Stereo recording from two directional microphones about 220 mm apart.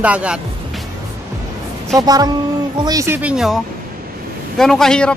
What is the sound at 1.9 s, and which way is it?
Speech, 15° right (ahead or behind).